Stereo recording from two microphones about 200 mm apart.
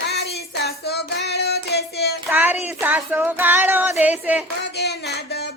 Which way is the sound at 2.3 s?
10° right (ahead or behind).